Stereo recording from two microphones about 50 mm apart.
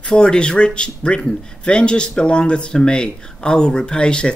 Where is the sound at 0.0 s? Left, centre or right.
Centre.